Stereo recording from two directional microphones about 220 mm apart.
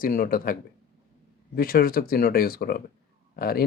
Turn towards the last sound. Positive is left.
turn(degrees=45)  # may be behind; listen again after turning